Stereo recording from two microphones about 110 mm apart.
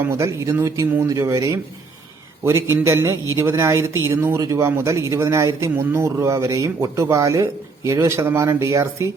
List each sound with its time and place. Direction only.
0.1 s speech: 30° right (ahead or behind)